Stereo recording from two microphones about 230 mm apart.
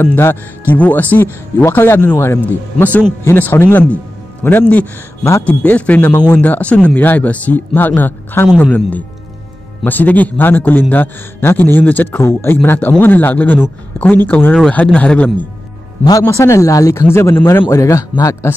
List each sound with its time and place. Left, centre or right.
0.0 s speech: centre